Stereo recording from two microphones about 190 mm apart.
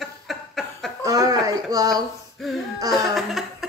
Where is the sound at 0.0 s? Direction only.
Centre (ahead or behind).